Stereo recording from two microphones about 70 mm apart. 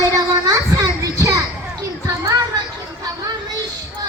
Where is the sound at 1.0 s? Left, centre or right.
Right.